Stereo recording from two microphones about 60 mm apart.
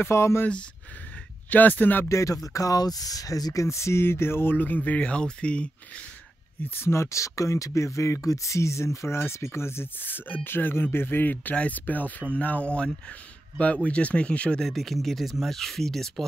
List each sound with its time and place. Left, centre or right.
0.0 s speech: left
1.5 s speech: left
2.0 s speech: left
3.6 s speech: left; by 6.0 s centre
6.6 s speech: left
13.8 s speech: left
14.6 s speech: centre